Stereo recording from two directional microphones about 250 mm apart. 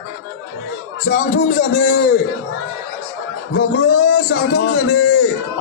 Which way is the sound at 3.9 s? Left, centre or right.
Left.